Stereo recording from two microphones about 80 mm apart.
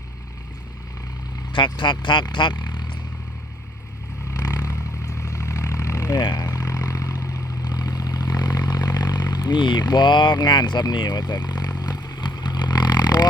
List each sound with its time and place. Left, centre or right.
1.5 s speech: left
4.5 s vehicle: left
9.3 s speech: left
11.8 s vehicle: left